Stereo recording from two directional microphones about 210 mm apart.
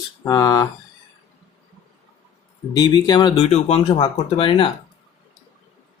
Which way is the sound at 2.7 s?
20° left (ahead or behind).